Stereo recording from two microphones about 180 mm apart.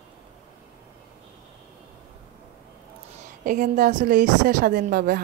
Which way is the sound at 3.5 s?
45° right (ahead or behind).